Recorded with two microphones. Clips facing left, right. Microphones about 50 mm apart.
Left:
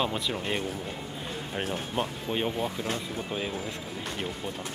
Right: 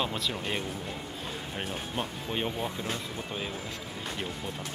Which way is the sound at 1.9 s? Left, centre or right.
Centre.